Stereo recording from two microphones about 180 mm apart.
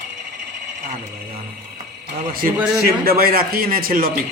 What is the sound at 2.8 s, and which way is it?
A man's voice, 60° right (ahead or behind).